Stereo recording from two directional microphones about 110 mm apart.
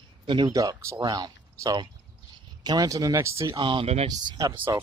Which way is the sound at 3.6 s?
50° right (ahead or behind).